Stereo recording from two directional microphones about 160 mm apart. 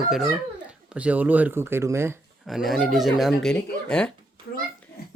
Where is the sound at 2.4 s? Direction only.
Centre (ahead or behind).